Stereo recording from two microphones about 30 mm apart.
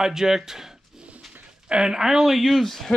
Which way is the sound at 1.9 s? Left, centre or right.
Centre.